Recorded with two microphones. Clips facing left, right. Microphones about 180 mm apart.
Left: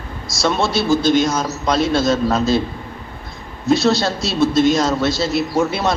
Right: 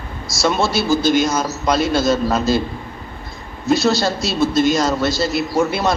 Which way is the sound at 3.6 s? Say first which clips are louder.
Left 1 dB; centre (ahead or behind).